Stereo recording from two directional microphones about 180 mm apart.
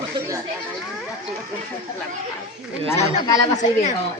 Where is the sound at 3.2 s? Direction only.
20° left (ahead or behind).